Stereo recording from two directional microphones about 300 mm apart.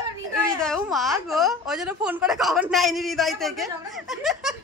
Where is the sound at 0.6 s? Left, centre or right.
Centre.